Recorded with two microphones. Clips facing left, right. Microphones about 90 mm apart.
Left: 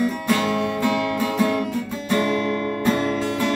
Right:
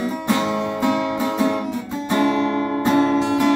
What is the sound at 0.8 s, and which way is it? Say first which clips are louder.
Music: right 4 dB; 20° right (ahead or behind).